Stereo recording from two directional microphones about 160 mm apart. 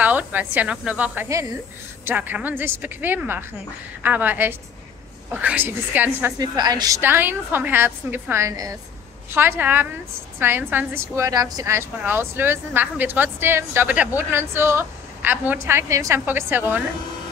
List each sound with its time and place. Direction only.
0.0 s a woman's voice: 10° right (ahead or behind)
6.3 s a woman's voice: 25° right (ahead or behind)
7.0 s a woman's voice: 15° right (ahead or behind)